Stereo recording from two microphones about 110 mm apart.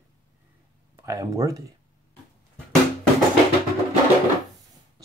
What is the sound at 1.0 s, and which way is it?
Speech, 30° right (ahead or behind).